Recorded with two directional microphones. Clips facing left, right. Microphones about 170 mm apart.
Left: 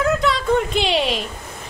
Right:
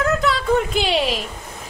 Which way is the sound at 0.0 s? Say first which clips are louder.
Left 1 dB; centre (ahead or behind).